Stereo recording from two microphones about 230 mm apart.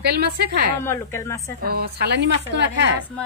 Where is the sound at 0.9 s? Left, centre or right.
Centre.